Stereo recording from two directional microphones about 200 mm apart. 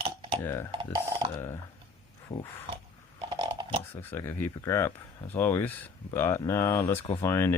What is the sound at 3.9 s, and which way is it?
Speech, 10° left (ahead or behind).